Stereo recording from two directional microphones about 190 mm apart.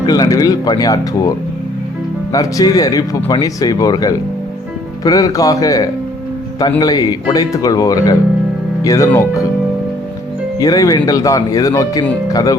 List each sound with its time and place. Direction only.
0.0 s speech: 20° left (ahead or behind)
2.3 s speech: 20° left (ahead or behind)
10.6 s speech: 20° left (ahead or behind)